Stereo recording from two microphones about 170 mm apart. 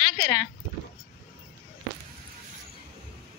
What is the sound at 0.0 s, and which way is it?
Speech, 25° left (ahead or behind).